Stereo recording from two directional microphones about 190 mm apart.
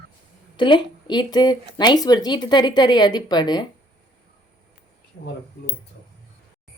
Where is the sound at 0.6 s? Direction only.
25° left (ahead or behind).